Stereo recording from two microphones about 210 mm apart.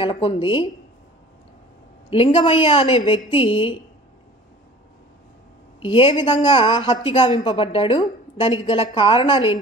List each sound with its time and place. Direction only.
0.0 s a woman's voice: 25° left (ahead or behind)
2.0 s a woman's voice: 25° left (ahead or behind)
5.8 s a woman's voice: 25° left (ahead or behind)